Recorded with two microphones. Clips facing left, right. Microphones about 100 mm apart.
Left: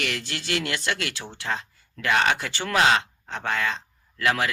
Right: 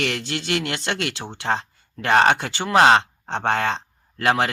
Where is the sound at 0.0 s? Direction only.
25° right (ahead or behind).